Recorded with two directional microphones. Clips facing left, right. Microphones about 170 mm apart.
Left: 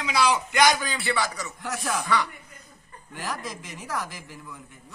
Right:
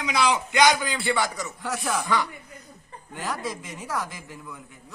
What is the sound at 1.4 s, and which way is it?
Speech, centre (ahead or behind).